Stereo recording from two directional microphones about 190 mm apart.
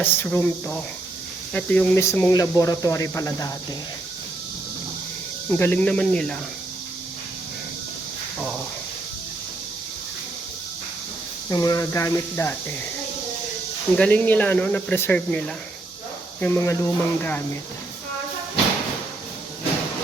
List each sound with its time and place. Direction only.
0.0 s speech: 10° left (ahead or behind)
5.5 s speech: 10° left (ahead or behind)
11.4 s speech: 20° left (ahead or behind)
13.9 s speech: 5° left (ahead or behind)